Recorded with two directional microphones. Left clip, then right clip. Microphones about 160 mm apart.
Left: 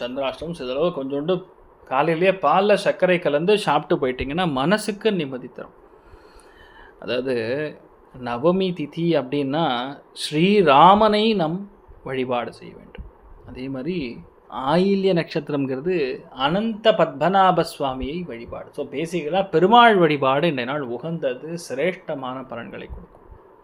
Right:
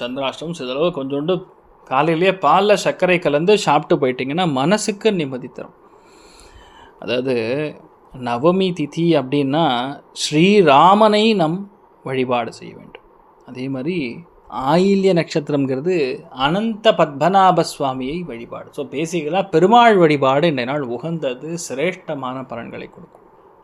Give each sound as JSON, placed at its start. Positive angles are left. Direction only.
{"t": 0.0, "sound": "speech", "side_deg": -45}
{"t": 7.0, "sound": "speech", "side_deg": -40}